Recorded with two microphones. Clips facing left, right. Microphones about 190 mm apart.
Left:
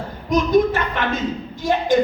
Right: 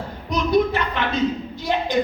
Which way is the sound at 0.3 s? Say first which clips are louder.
Left 3 dB; 45° left (ahead or behind).